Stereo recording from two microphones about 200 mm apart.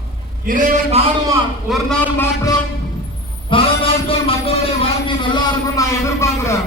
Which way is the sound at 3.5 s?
25° left (ahead or behind).